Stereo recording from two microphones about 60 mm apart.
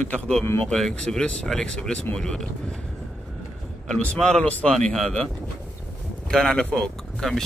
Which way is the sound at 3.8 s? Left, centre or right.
Centre.